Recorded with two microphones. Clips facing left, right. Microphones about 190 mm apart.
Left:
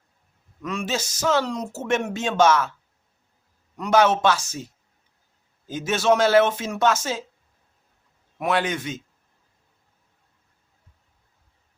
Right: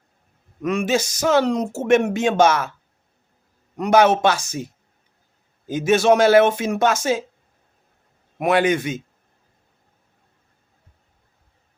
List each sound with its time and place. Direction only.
0.7 s speech: 15° right (ahead or behind)
3.8 s a man's voice: 15° right (ahead or behind)
8.6 s speech: 10° right (ahead or behind)